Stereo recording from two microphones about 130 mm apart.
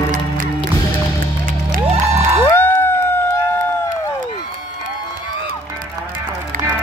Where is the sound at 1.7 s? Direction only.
55° right (ahead or behind).